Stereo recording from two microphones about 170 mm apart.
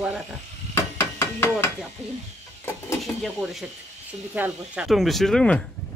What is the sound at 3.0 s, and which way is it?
Speech, centre (ahead or behind).